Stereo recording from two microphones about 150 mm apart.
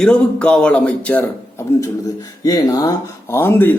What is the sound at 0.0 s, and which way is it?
Speech, 5° left (ahead or behind).